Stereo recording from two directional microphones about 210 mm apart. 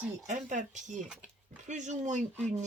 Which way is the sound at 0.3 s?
35° right (ahead or behind).